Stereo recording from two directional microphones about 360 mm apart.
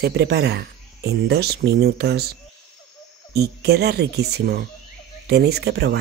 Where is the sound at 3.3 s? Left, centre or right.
Right.